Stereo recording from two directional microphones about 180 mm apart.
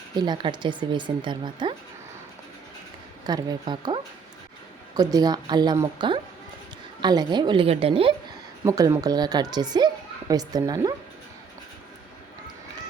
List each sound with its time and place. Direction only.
0.2 s a woman's voice: 25° right (ahead or behind)
3.2 s a woman's voice: 20° right (ahead or behind)
8.6 s a woman's voice: 20° right (ahead or behind)